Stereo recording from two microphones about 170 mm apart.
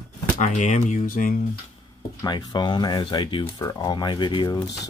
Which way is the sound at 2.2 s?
25° left (ahead or behind).